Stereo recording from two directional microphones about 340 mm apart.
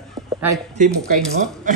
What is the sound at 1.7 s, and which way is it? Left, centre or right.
Speech, right.